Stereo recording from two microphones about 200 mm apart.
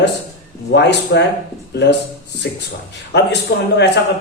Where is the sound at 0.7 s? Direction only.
60° left (ahead or behind).